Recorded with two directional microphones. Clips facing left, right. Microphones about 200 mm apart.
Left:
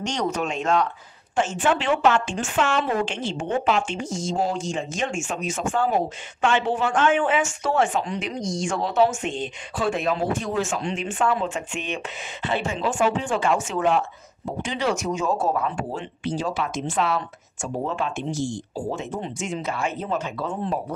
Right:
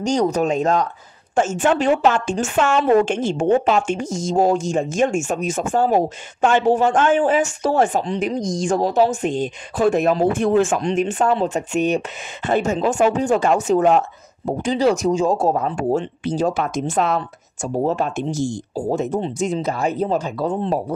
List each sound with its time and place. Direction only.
0.0 s a woman's voice: 35° right (ahead or behind); by 10.8 s 55° right (ahead or behind)
10.8 s speech: 40° right (ahead or behind)